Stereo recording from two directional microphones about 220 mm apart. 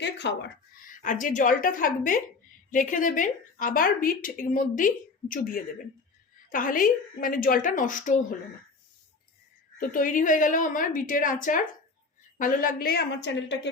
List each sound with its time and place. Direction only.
0.0 s speech: 50° left (ahead or behind)
0.9 s a woman's voice: 35° left (ahead or behind)
9.9 s a woman's voice: 40° left (ahead or behind)